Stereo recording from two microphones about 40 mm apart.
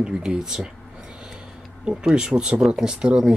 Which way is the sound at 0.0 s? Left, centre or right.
Right.